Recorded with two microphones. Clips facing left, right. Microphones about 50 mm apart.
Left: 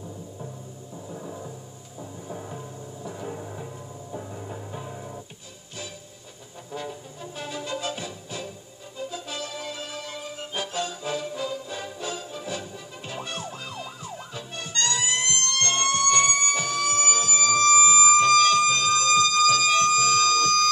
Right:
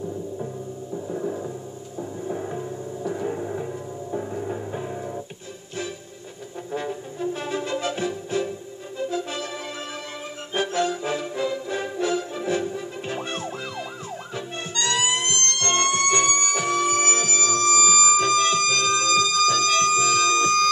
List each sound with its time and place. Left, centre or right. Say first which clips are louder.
0.9 s music: right 9 dB; centre
6.7 s music: right 5 dB; right
10.5 s music: right 8 dB; right
15.2 s music: right 1 dB; right
17.3 s music: even; centre
17.7 s music: even; centre
18.4 s music: left 1 dB; right
19.1 s music: left 2 dB; right